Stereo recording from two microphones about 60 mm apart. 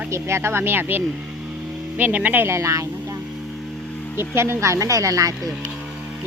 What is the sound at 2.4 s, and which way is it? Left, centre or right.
Speech, right.